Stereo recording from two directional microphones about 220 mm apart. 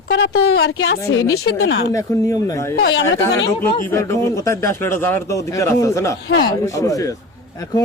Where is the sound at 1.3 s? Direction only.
70° left (ahead or behind).